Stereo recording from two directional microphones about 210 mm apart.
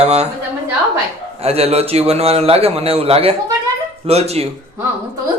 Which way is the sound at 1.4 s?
30° right (ahead or behind).